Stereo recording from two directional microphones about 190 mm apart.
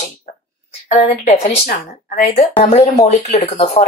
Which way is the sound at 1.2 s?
35° left (ahead or behind).